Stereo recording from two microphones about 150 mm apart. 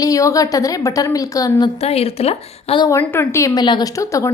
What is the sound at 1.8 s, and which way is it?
A woman's voice, 40° left (ahead or behind).